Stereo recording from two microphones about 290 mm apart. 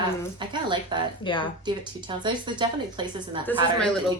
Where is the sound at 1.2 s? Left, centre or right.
Centre.